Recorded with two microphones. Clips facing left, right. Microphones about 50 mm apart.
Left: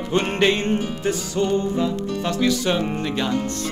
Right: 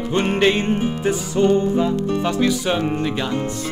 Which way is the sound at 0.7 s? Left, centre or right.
Right.